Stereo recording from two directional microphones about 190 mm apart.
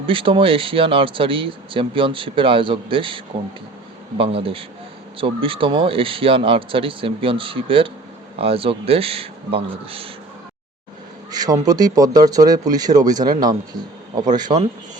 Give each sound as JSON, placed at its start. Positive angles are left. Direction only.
{"t": 0.0, "sound": "speech", "side_deg": -25}
{"t": 4.2, "sound": "speech", "side_deg": -30}
{"t": 11.3, "sound": "speech", "side_deg": -20}
{"t": 14.3, "sound": "speech", "side_deg": -20}